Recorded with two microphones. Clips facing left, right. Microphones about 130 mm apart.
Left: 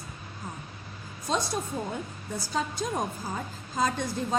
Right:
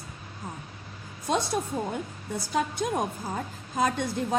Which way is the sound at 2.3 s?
60° right (ahead or behind).